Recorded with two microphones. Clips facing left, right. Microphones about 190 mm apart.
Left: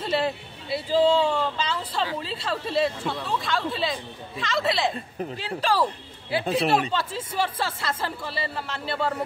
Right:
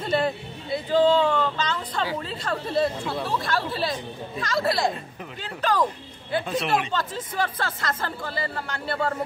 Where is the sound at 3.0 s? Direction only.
Centre (ahead or behind).